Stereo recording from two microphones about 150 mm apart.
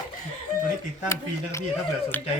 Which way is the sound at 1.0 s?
15° left (ahead or behind).